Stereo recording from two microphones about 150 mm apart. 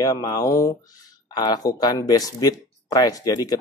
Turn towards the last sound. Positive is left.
turn(degrees=25)  # may be behind; listen again after turning